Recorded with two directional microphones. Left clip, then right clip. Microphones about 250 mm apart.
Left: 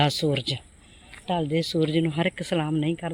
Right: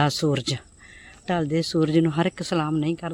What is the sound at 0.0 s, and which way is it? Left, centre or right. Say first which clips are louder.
Speech: right 1 dB; centre.